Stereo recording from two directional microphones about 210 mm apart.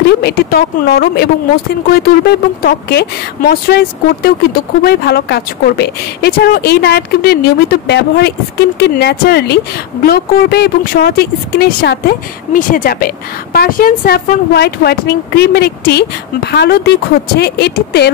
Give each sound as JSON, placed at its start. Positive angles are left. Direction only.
{"t": 0.2, "sound": "a woman's voice", "side_deg": 50}
{"t": 12.5, "sound": "a woman's voice", "side_deg": 40}